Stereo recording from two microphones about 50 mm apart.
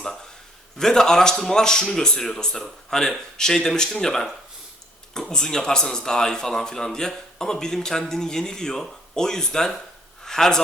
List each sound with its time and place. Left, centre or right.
0.8 s speech: centre